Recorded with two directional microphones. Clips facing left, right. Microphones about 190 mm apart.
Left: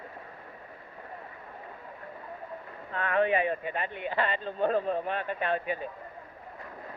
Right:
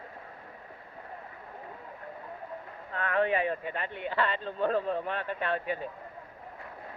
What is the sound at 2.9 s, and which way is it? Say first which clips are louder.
Speech: left 2 dB; 20° left (ahead or behind).